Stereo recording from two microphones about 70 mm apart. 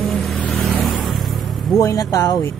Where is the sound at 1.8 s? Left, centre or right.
Left.